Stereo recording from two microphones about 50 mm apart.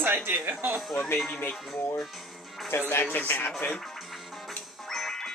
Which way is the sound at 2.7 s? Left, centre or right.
Left.